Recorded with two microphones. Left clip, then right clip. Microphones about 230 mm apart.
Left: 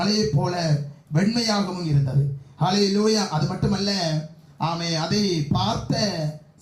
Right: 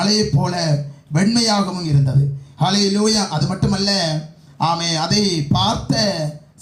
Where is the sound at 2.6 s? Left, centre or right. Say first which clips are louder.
Right 4 dB; right.